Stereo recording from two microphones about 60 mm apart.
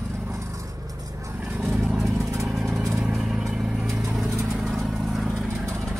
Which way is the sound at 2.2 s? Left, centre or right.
Right.